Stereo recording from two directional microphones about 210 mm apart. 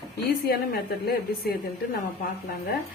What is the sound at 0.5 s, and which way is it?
Speech, 50° left (ahead or behind).